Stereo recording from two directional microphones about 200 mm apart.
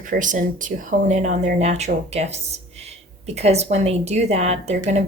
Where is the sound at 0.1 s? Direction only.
40° right (ahead or behind).